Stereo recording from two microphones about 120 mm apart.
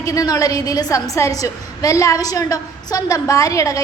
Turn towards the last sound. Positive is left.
turn(degrees=25)  # may be behind; listen again after turning